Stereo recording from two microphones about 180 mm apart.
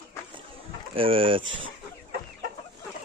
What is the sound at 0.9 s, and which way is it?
Speech, 30° right (ahead or behind).